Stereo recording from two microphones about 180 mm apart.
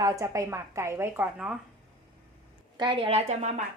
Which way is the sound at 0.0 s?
15° right (ahead or behind).